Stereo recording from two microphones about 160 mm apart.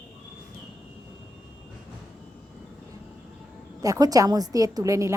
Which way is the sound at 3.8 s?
20° right (ahead or behind).